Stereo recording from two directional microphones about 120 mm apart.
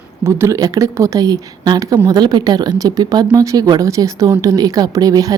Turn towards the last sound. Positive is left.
turn(degrees=-30)  # may be behind; listen again after turning